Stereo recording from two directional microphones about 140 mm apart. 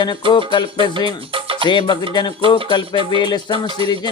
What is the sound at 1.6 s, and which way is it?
Music, 35° left (ahead or behind).